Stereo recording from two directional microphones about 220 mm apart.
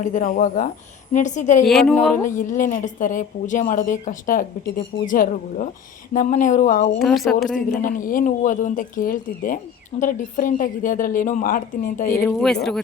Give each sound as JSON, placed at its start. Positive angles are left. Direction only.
{"t": 0.0, "sound": "a woman's voice", "side_deg": 35}
{"t": 1.6, "sound": "a woman's voice", "side_deg": 0}
{"t": 2.6, "sound": "a woman's voice", "side_deg": 35}
{"t": 7.0, "sound": "a woman's voice", "side_deg": 0}
{"t": 7.8, "sound": "a woman's voice", "side_deg": 40}
{"t": 12.2, "sound": "a woman's voice", "side_deg": 0}